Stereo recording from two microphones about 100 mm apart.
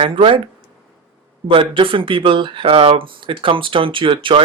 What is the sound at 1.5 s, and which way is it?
Speech, 60° right (ahead or behind).